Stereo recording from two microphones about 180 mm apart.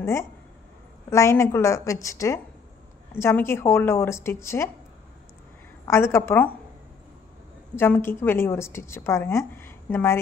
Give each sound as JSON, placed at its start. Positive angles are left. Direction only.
{"t": 0.0, "sound": "a woman's voice", "side_deg": 15}
{"t": 5.9, "sound": "a woman's voice", "side_deg": 15}
{"t": 7.7, "sound": "a woman's voice", "side_deg": 10}